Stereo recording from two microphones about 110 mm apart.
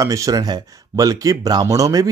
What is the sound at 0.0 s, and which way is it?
Speech, 30° right (ahead or behind).